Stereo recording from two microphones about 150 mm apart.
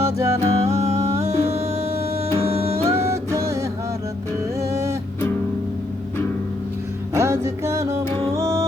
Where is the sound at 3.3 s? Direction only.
20° right (ahead or behind).